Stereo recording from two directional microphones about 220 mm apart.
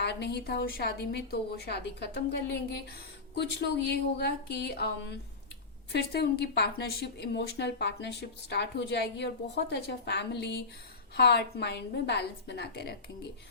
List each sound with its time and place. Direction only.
0.0 s a woman's voice: 50° left (ahead or behind)
3.8 s a woman's voice: 50° left (ahead or behind)